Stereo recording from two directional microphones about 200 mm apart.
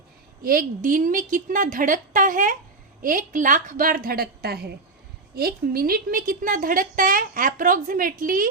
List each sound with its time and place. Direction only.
0.4 s a woman's voice: 45° right (ahead or behind)